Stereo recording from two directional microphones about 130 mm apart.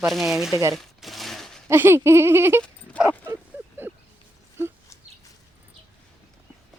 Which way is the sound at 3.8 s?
15° right (ahead or behind).